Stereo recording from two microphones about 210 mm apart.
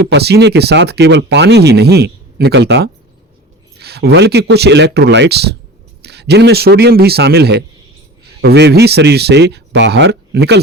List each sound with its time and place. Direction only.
0.1 s speech: 50° right (ahead or behind)